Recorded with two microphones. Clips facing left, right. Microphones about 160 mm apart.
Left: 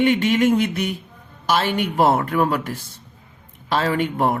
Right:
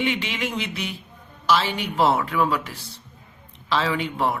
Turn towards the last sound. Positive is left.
turn(degrees=50)  # may be behind; listen again after turning